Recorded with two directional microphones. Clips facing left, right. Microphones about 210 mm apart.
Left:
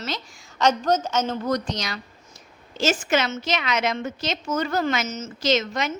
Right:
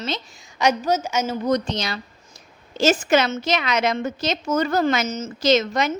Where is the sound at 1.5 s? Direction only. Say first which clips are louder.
Right 4 dB; 25° right (ahead or behind).